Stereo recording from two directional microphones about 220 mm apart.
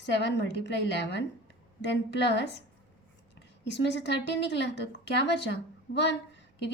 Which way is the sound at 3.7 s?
50° left (ahead or behind).